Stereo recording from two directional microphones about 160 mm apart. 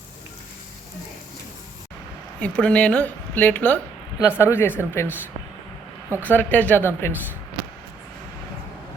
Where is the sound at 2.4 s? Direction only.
10° left (ahead or behind).